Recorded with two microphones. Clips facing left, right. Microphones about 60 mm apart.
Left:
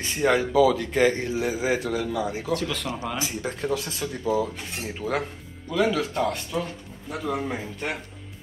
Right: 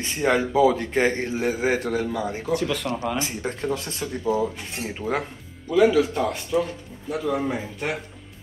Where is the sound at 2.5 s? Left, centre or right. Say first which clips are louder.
Right 5 dB; centre.